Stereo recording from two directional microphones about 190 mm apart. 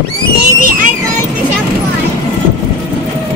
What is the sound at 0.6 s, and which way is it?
Speech, 45° right (ahead or behind).